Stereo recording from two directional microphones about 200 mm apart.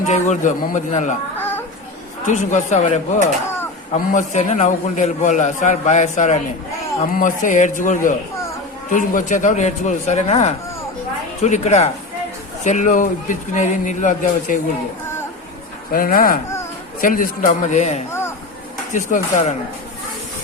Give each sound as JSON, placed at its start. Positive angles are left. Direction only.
{"t": 0.1, "sound": "a man's voice", "side_deg": 40}
{"t": 1.4, "sound": "a sound", "side_deg": 10}
{"t": 2.2, "sound": "a man's voice", "side_deg": 40}
{"t": 15.9, "sound": "a man's voice", "side_deg": 45}